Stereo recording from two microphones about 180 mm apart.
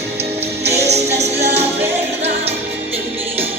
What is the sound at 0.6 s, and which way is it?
Music, 65° right (ahead or behind).